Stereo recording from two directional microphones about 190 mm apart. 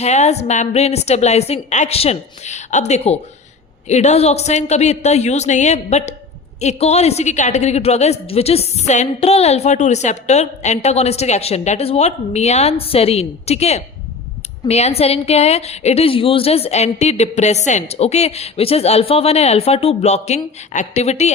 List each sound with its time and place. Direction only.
0.0 s a woman's voice: 35° left (ahead or behind)